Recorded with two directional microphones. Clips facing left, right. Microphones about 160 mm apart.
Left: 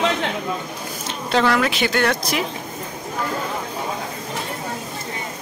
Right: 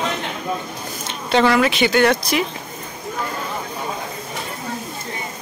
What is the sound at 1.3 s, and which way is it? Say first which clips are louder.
Speech: right 3 dB; centre (ahead or behind).